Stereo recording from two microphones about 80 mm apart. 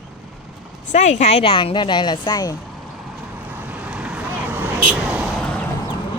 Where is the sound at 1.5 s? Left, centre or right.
Left.